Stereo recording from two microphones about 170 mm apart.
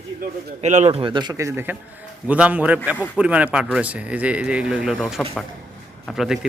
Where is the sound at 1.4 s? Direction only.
15° right (ahead or behind).